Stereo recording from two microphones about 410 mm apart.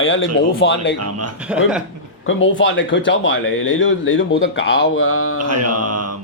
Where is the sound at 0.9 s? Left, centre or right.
Right.